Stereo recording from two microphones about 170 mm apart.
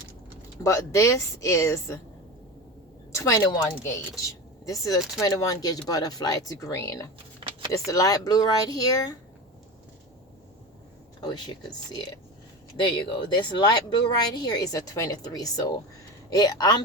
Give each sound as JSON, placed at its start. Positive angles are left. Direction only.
{"t": 0.6, "sound": "speech", "side_deg": 20}
{"t": 3.1, "sound": "speech", "side_deg": 20}
{"t": 11.2, "sound": "speech", "side_deg": 25}